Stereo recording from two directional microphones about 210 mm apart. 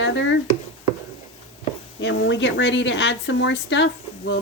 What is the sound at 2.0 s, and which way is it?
Speech, 60° left (ahead or behind).